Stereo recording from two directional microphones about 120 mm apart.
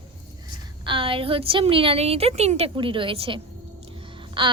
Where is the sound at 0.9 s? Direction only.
45° right (ahead or behind); by 2.6 s 65° right (ahead or behind).